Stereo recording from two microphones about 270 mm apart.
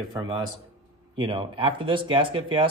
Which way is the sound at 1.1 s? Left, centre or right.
Centre.